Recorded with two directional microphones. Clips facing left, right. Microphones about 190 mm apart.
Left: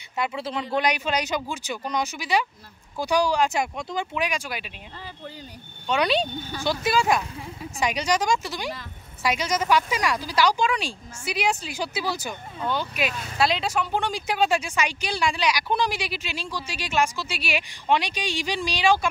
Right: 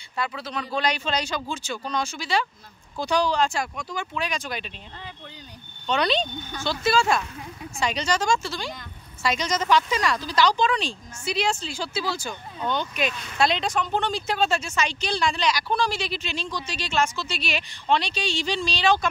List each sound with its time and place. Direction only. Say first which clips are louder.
0.2 s speech: left 2 dB; 20° left (ahead or behind)
5.9 s speech: left 1 dB; 10° left (ahead or behind)